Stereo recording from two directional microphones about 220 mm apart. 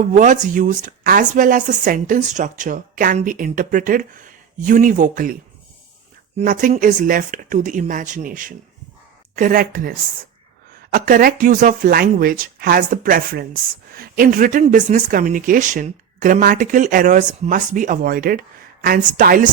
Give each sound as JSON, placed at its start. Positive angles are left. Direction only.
{"t": 0.0, "sound": "speech", "side_deg": -35}
{"t": 10.9, "sound": "speech", "side_deg": -40}